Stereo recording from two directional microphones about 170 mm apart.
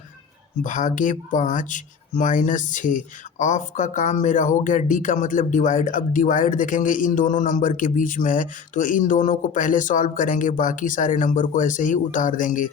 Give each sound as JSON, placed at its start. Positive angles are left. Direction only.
{"t": 0.6, "sound": "speech", "side_deg": 50}